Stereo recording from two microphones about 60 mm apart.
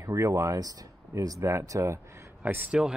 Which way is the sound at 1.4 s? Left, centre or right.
Right.